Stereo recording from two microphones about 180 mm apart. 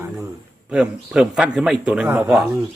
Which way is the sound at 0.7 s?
5° right (ahead or behind).